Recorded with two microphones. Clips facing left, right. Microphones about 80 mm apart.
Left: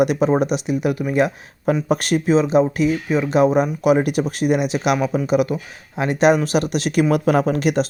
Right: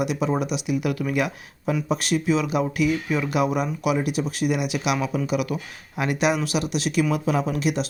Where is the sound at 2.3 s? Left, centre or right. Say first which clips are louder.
Left 7 dB; left.